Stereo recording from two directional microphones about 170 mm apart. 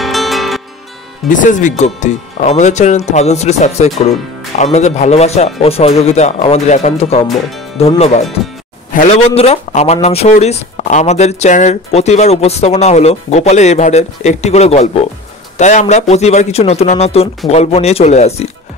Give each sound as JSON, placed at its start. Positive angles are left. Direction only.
{"t": 0.0, "sound": "music", "side_deg": 0}
{"t": 1.3, "sound": "speech", "side_deg": 50}